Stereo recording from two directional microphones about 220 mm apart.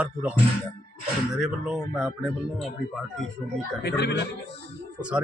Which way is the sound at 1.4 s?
Centre (ahead or behind).